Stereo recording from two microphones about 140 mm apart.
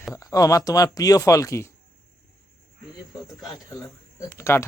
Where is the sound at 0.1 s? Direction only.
25° left (ahead or behind).